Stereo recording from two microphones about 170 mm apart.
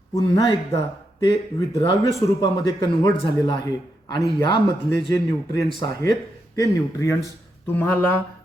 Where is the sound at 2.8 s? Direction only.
30° left (ahead or behind).